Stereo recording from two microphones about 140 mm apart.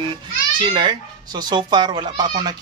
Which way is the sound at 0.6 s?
35° right (ahead or behind).